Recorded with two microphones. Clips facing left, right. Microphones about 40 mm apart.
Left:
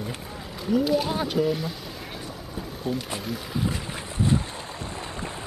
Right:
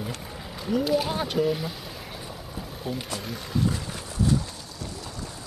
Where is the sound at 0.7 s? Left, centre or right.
Centre.